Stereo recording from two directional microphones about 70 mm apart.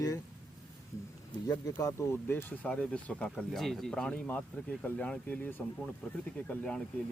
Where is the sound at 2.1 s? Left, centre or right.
Left.